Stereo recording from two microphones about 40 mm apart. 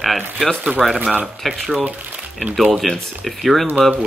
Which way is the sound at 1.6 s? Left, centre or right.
Centre.